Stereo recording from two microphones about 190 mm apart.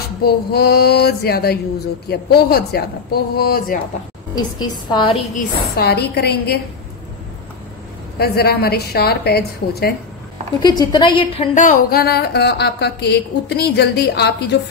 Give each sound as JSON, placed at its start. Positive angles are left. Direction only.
{"t": 0.2, "sound": "a woman's voice", "side_deg": 55}
{"t": 4.4, "sound": "a woman's voice", "side_deg": 25}
{"t": 5.3, "sound": "a woman's voice", "side_deg": 55}
{"t": 8.2, "sound": "a woman's voice", "side_deg": 55}
{"t": 10.6, "sound": "a woman's voice", "side_deg": 20}
{"t": 11.5, "sound": "a woman's voice", "side_deg": 50}